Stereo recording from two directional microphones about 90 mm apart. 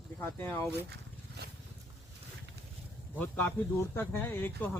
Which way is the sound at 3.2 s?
20° left (ahead or behind).